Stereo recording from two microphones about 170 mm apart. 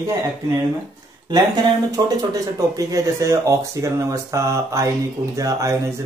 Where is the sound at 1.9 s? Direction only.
20° right (ahead or behind).